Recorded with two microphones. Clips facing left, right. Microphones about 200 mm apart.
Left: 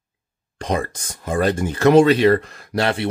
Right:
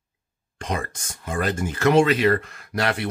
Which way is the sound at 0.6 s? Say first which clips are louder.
Left 6 dB; 35° left (ahead or behind).